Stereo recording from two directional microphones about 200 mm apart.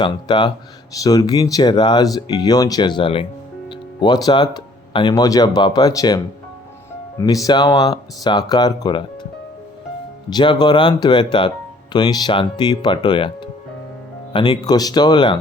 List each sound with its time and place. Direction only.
0.0 s speech: 25° left (ahead or behind)
10.2 s speech: 20° left (ahead or behind)